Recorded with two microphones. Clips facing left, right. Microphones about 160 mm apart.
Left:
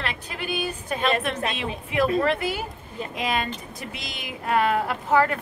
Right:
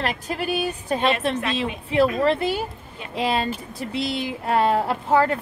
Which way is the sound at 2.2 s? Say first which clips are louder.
Right 4 dB; 30° right (ahead or behind).